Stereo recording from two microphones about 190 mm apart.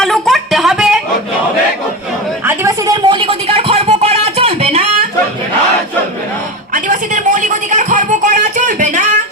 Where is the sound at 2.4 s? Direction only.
15° right (ahead or behind); by 4.8 s 30° right (ahead or behind).